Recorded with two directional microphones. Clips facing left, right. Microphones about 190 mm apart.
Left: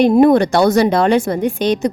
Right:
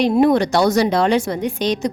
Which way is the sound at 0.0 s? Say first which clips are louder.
Left 4 dB; 50° left (ahead or behind).